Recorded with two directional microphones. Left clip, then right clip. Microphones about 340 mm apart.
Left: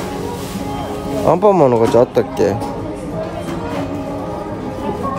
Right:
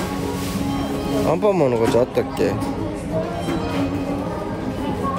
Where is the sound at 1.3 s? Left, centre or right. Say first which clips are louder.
Left 8 dB; centre.